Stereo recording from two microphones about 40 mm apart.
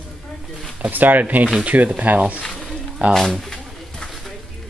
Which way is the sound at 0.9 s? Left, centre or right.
Right.